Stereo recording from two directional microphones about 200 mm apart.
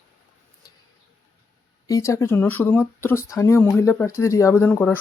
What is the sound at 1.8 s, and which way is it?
Speech, 15° left (ahead or behind).